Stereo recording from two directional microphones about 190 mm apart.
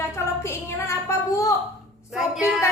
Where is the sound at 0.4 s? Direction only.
15° left (ahead or behind).